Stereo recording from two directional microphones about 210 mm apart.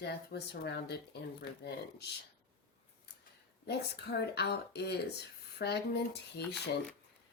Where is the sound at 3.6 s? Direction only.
50° left (ahead or behind).